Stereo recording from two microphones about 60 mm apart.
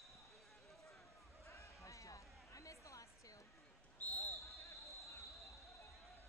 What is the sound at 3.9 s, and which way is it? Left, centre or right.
Basketball bounce, left.